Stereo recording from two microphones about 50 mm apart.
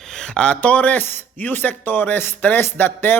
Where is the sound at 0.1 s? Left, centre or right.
Centre.